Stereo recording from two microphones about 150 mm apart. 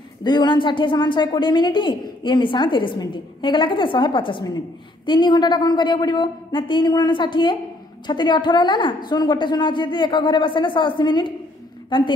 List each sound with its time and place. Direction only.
0.2 s a woman's voice: 30° left (ahead or behind)